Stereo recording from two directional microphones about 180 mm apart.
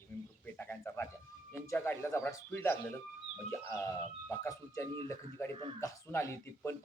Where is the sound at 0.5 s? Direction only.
10° left (ahead or behind).